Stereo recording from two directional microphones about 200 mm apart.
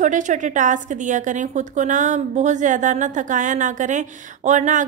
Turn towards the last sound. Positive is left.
turn(degrees=-40)  # may be behind; listen again after turning